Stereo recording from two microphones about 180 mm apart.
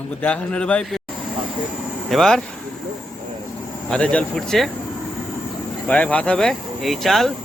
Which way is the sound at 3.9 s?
5° left (ahead or behind).